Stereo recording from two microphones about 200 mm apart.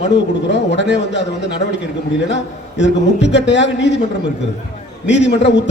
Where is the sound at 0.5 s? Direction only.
60° left (ahead or behind).